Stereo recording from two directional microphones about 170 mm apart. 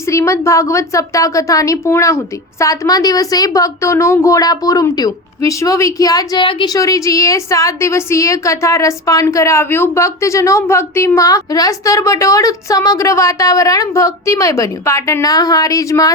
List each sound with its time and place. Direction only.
0.0 s a woman's voice: 15° left (ahead or behind)